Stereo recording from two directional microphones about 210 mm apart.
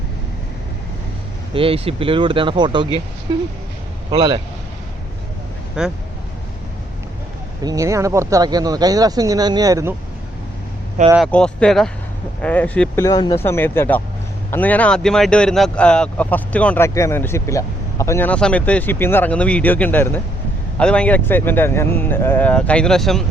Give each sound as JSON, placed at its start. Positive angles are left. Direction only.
{"t": 1.5, "sound": "speech", "side_deg": -25}
{"t": 5.8, "sound": "speech", "side_deg": -5}
{"t": 7.6, "sound": "speech", "side_deg": -15}
{"t": 11.3, "sound": "speech", "side_deg": 5}
{"t": 13.1, "sound": "speech", "side_deg": 20}